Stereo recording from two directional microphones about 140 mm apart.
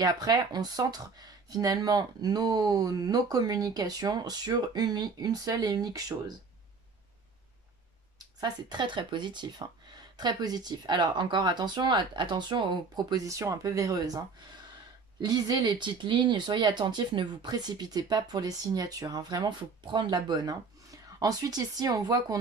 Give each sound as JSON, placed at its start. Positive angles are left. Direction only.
{"t": 0.0, "sound": "speech", "side_deg": -30}
{"t": 8.4, "sound": "speech", "side_deg": -30}